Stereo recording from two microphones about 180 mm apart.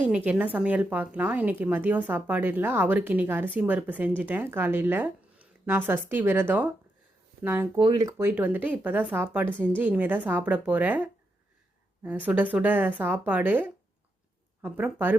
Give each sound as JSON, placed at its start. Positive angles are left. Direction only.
{"t": 0.0, "sound": "a woman's voice", "side_deg": -10}
{"t": 7.8, "sound": "speech", "side_deg": -25}
{"t": 8.2, "sound": "a woman's voice", "side_deg": -10}